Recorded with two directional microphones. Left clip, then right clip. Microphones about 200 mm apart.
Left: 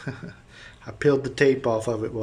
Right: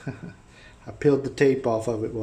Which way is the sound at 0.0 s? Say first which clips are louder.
Left 2 dB; centre (ahead or behind).